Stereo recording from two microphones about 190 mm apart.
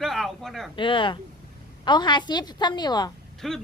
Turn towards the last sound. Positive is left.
turn(degrees=0)  # may be behind; listen again after turning